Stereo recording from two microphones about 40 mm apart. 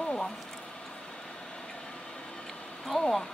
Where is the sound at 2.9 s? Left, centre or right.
Centre.